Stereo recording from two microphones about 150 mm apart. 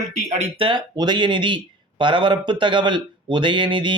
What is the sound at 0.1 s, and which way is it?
Speech, 50° right (ahead or behind).